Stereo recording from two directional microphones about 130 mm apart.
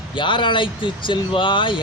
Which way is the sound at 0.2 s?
40° left (ahead or behind).